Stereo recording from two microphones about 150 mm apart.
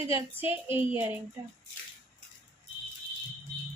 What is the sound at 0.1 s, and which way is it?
Speech, 15° right (ahead or behind).